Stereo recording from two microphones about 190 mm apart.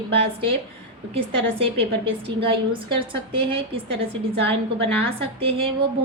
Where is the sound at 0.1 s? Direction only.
30° right (ahead or behind).